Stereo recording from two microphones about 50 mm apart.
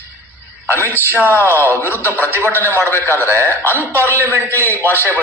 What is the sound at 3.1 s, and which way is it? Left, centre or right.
Speech, right.